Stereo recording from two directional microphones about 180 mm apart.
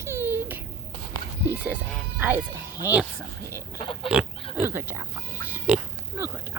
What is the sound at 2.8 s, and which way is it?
Speech, 10° right (ahead or behind).